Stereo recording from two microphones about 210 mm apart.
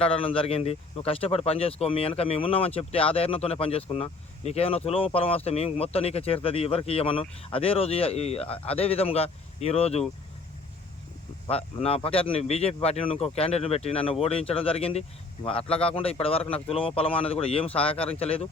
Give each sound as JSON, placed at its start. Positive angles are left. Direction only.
{"t": 0.0, "sound": "speech", "side_deg": 25}
{"t": 11.4, "sound": "speech", "side_deg": 30}